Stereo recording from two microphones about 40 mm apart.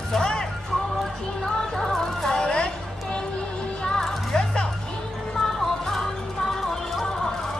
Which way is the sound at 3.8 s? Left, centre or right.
Centre.